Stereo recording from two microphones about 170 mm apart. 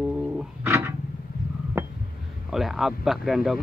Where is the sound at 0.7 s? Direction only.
15° right (ahead or behind).